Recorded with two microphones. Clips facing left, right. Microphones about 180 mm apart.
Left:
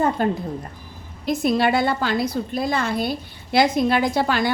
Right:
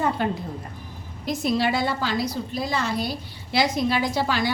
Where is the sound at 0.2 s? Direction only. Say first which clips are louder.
Left 4 dB; 45° left (ahead or behind).